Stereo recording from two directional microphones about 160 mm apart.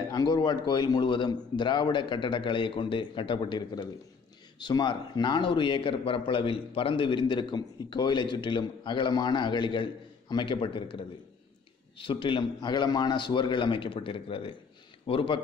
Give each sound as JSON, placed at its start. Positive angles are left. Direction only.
{"t": 0.1, "sound": "a man's voice", "side_deg": 25}